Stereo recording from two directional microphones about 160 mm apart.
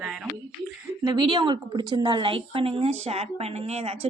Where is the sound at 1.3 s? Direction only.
30° right (ahead or behind).